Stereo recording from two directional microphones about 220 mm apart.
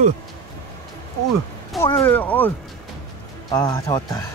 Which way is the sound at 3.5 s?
15° left (ahead or behind).